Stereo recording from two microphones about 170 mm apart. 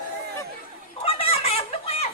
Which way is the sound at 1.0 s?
35° left (ahead or behind).